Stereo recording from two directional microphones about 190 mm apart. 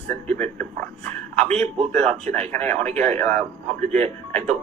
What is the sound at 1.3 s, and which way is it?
A man's voice, 35° right (ahead or behind).